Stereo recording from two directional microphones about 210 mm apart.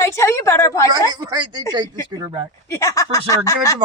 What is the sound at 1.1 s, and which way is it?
Speech, 20° right (ahead or behind).